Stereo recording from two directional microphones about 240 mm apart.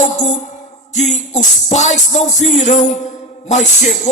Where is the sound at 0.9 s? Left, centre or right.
Left.